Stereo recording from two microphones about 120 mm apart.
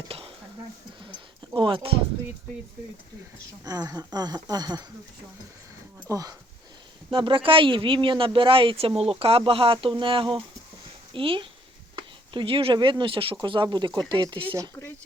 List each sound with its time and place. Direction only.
0.1 s dishes: 55° right (ahead or behind)
1.5 s speech: 45° right (ahead or behind)
3.6 s speech: 35° right (ahead or behind)
6.1 s speech: 30° right (ahead or behind)
7.1 s speech: 45° right (ahead or behind)